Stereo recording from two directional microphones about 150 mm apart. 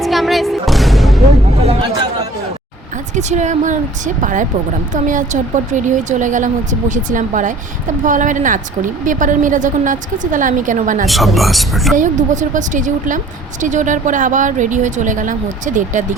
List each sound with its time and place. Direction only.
0.0 s music: centre (ahead or behind)
3.2 s speech: 50° right (ahead or behind)
11.0 s speech: centre (ahead or behind)
11.9 s speech: 55° right (ahead or behind)